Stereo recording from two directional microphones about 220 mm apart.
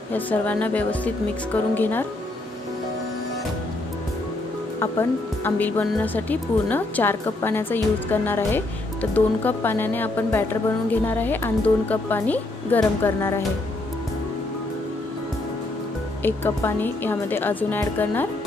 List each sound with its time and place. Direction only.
0.1 s speech: 5° left (ahead or behind)
4.7 s speech: 10° left (ahead or behind)
16.2 s speech: 10° left (ahead or behind)